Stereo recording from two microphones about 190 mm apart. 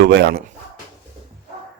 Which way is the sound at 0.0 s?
60° right (ahead or behind).